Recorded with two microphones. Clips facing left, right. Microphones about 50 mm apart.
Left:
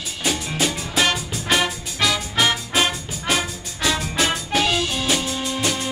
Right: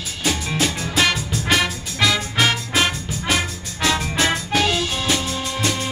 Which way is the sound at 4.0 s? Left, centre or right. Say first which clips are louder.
Right 1 dB; right.